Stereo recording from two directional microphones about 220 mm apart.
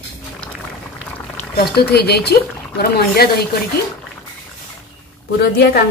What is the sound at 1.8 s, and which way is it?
Speech, 45° left (ahead or behind).